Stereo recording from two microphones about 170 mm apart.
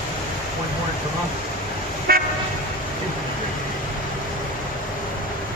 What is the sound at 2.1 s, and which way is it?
Toot, 60° right (ahead or behind).